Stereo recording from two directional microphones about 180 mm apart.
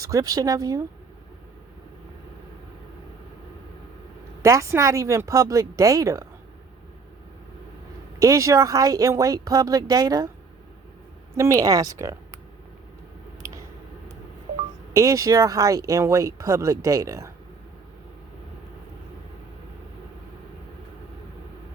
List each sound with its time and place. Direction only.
0.0 s speech: 20° right (ahead or behind)
4.4 s speech: 15° right (ahead or behind)
8.2 s speech: 15° right (ahead or behind)
11.3 s speech: 15° right (ahead or behind)
14.9 s speech: 15° right (ahead or behind)